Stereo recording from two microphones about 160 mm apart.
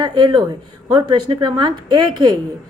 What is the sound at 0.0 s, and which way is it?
A woman's voice, 25° right (ahead or behind).